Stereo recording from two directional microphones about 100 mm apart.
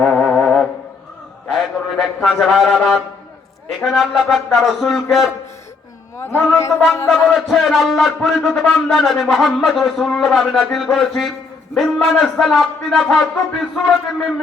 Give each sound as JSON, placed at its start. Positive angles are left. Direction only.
{"t": 0.0, "sound": "music", "side_deg": 15}
{"t": 1.5, "sound": "a man's voice", "side_deg": 0}
{"t": 6.1, "sound": "a man's voice", "side_deg": 25}
{"t": 7.3, "sound": "a man's voice", "side_deg": 0}